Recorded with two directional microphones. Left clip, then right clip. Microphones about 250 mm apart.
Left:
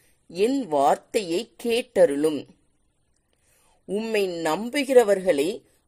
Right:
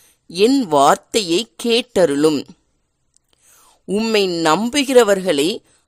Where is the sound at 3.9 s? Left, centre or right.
Right.